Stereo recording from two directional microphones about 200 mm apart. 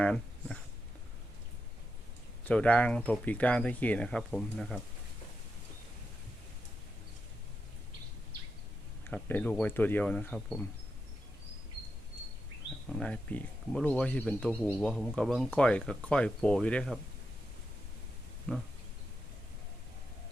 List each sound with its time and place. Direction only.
0.0 s a sound: 5° left (ahead or behind)
2.4 s speech: 5° left (ahead or behind)
9.0 s speech: 10° left (ahead or behind)
12.9 s speech: 5° left (ahead or behind)
18.5 s speech: 5° left (ahead or behind)